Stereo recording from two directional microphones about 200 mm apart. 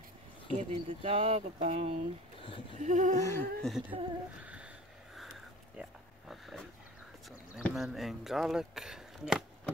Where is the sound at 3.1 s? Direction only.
15° left (ahead or behind).